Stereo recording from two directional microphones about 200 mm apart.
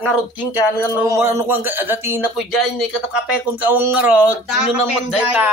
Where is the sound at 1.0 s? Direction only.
15° right (ahead or behind).